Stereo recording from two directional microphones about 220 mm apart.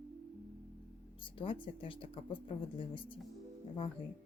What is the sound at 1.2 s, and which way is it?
Speech, 25° left (ahead or behind).